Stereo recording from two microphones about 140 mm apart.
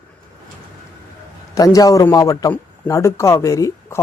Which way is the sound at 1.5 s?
25° left (ahead or behind).